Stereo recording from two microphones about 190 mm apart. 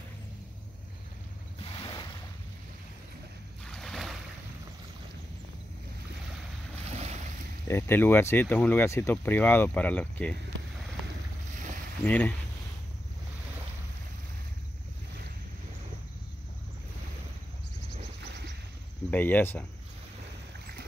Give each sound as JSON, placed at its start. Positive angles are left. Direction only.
{"t": 1.6, "sound": "boat", "side_deg": 25}
{"t": 3.6, "sound": "boat", "side_deg": 0}
{"t": 6.9, "sound": "boat", "side_deg": -35}
{"t": 7.6, "sound": "speech", "side_deg": 15}
{"t": 12.0, "sound": "speech", "side_deg": 10}
{"t": 19.0, "sound": "speech", "side_deg": 10}